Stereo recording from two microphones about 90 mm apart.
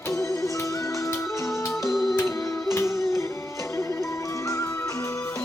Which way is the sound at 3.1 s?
35° left (ahead or behind).